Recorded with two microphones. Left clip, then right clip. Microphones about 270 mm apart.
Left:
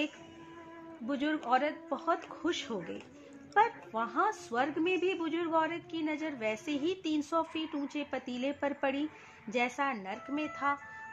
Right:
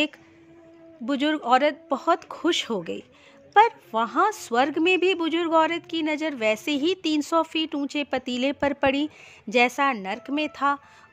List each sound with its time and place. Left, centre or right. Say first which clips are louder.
1.0 s speech: right 9 dB; right